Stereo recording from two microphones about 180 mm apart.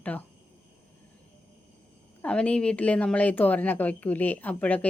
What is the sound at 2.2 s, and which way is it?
A woman's voice, 5° left (ahead or behind).